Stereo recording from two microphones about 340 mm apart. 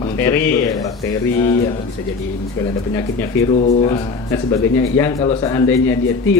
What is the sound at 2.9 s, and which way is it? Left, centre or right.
Speech, centre.